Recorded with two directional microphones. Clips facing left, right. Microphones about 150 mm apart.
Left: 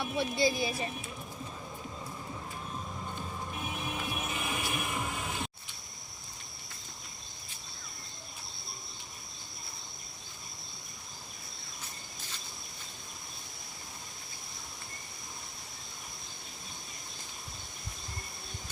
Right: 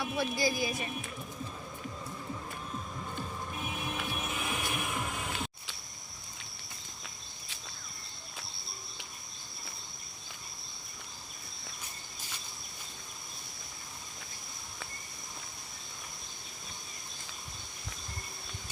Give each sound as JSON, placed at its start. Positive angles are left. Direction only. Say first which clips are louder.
{"t": 0.0, "sound": "speech", "louder": "left 2 dB", "side_deg": 25}
{"t": 4.0, "sound": "music", "louder": "even", "side_deg": 0}